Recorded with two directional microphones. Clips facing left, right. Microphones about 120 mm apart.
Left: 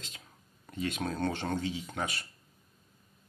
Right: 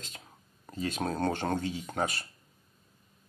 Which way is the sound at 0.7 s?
35° right (ahead or behind).